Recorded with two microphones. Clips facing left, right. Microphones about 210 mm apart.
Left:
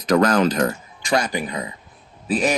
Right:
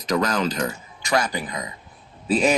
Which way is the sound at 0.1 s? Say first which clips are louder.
Left 6 dB; 55° left (ahead or behind).